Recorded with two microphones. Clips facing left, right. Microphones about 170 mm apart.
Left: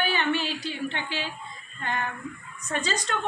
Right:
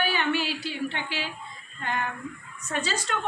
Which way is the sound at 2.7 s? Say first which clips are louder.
Left 1 dB; 5° right (ahead or behind).